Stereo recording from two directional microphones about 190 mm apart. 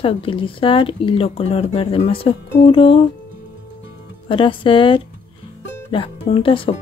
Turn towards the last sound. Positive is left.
turn(degrees=30)  # may be behind; listen again after turning